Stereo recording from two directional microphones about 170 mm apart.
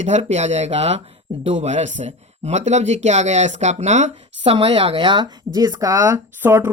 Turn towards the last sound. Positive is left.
turn(degrees=-10)  # may be behind; listen again after turning